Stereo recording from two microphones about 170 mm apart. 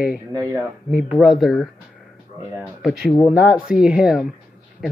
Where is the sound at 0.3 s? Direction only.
20° right (ahead or behind).